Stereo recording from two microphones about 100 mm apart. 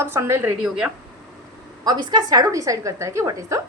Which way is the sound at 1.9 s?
40° right (ahead or behind).